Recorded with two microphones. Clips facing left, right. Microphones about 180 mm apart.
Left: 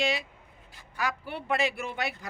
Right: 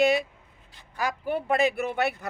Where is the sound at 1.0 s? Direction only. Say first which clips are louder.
Right 5 dB; 45° right (ahead or behind).